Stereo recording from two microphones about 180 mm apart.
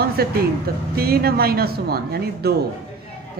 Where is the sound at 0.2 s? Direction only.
60° right (ahead or behind).